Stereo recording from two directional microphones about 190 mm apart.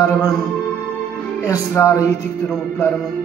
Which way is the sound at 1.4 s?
15° left (ahead or behind).